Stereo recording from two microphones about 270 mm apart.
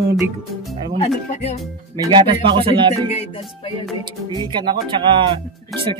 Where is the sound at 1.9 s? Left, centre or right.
Centre.